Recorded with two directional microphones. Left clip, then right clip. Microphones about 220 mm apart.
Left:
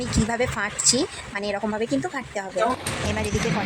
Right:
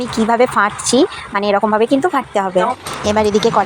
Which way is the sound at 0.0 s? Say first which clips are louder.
Right 11 dB; 15° right (ahead or behind).